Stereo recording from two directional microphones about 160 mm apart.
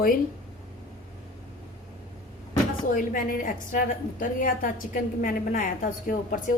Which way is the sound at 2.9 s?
60° left (ahead or behind).